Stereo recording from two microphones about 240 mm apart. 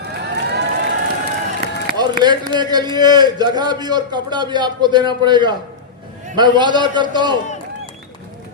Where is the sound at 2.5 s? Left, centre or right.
Centre.